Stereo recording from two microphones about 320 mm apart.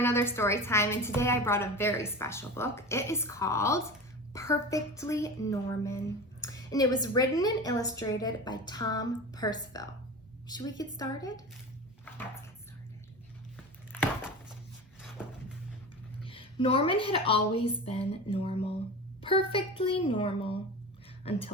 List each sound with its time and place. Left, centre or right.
0.0 s a woman's voice: centre
12.0 s a sound: centre
16.2 s a woman's voice: centre